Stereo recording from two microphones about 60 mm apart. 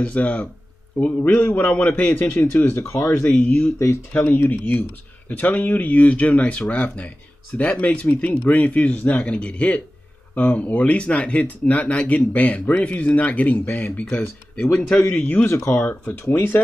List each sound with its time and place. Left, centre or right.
0.0 s speech: left
2.7 s speech: left
3.3 s speech: left
14.8 s speech: centre
15.4 s speech: left
15.9 s speech: left